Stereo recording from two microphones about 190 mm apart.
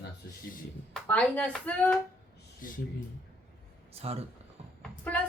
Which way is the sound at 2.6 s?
45° left (ahead or behind).